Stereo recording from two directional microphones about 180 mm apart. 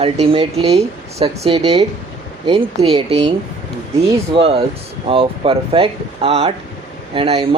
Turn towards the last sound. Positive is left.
turn(degrees=-30)  # may be behind; listen again after turning